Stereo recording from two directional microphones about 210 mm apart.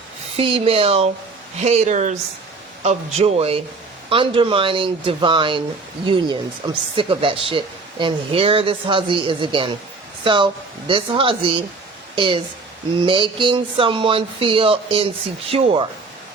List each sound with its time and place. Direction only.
0.3 s speech: 25° right (ahead or behind)